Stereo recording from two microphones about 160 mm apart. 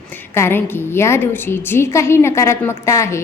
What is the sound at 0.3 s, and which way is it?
A woman's voice, 15° left (ahead or behind).